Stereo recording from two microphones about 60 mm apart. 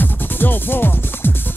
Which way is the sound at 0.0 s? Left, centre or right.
Left.